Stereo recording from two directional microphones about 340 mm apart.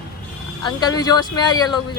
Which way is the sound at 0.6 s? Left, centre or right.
Centre.